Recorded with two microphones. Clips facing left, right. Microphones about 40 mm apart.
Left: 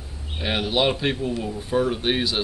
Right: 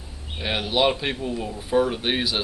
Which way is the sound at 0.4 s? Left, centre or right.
Centre.